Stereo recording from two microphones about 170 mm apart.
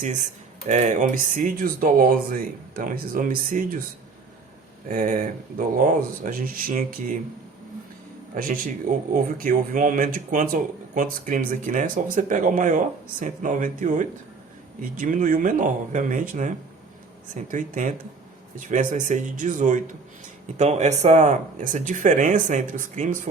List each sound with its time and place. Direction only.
0.7 s speech: 45° right (ahead or behind)
4.9 s speech: 50° right (ahead or behind)
8.4 s speech: 55° right (ahead or behind)